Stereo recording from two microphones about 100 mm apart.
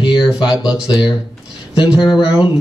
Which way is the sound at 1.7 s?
50° left (ahead or behind).